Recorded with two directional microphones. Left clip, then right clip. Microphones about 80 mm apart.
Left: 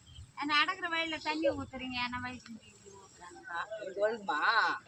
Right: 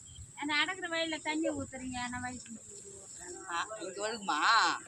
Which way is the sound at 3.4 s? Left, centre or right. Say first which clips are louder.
Right 1 dB; centre.